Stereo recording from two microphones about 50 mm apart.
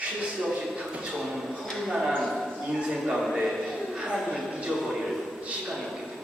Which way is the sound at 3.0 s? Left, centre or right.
Centre.